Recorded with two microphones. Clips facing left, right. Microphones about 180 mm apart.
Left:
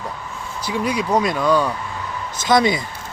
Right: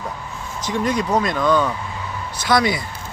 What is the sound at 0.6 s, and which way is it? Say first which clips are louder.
Speech: right 1 dB; 10° left (ahead or behind).